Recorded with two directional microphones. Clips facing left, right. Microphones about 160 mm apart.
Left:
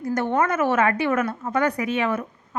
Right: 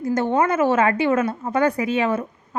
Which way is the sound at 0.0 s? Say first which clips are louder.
Right 3 dB; 25° right (ahead or behind).